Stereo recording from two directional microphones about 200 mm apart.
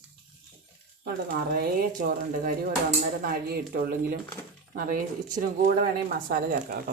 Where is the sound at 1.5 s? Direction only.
45° right (ahead or behind).